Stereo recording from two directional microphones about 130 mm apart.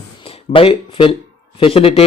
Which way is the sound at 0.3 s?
45° left (ahead or behind).